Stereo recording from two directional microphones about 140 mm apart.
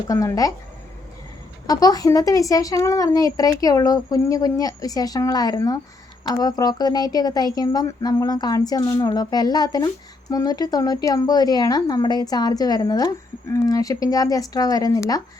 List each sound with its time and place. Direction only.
0.1 s speech: 25° left (ahead or behind)
1.6 s speech: 25° left (ahead or behind)